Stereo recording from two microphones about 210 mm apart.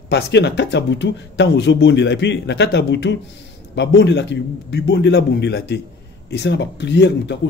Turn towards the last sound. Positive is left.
turn(degrees=55)  # may be behind; listen again after turning